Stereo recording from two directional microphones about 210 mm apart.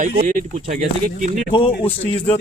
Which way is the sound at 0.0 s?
40° right (ahead or behind).